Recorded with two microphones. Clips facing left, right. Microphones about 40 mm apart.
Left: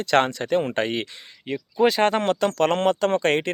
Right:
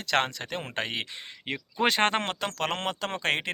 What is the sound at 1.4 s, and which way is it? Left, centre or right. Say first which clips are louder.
Speech: left 6 dB; right.